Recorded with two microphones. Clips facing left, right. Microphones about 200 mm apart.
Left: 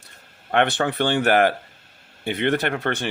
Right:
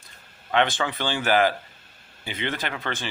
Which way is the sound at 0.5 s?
60° left (ahead or behind).